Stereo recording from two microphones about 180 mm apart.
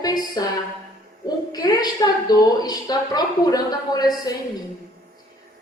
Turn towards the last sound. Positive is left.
turn(degrees=20)  # may be behind; listen again after turning